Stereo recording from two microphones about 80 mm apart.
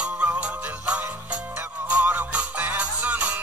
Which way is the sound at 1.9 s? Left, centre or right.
Right.